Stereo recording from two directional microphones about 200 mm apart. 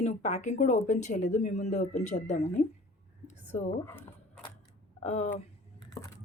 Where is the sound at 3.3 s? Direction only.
35° left (ahead or behind).